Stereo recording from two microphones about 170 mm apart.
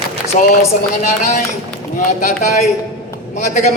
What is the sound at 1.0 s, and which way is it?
A man's voice, 50° left (ahead or behind).